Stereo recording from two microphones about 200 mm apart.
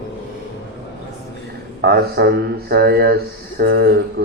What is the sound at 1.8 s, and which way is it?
Speech, 50° right (ahead or behind).